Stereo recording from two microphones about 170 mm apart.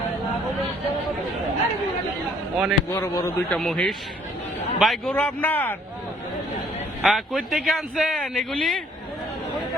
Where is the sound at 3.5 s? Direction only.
5° left (ahead or behind).